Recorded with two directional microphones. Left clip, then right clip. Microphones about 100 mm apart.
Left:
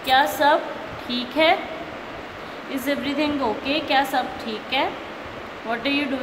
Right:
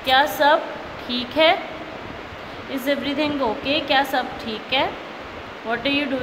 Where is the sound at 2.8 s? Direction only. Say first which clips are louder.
Right 2 dB; 20° right (ahead or behind).